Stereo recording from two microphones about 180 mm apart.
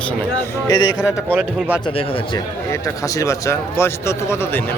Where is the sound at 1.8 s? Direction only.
30° left (ahead or behind).